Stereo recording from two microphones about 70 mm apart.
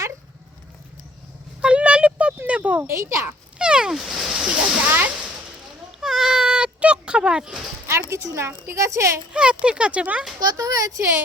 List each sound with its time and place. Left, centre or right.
1.6 s a sound: centre
2.8 s a woman's voice: right
3.6 s speech: centre
4.9 s speech: right
6.0 s a sound: centre
8.1 s a woman's voice: right
9.3 s speech: centre
10.4 s speech: right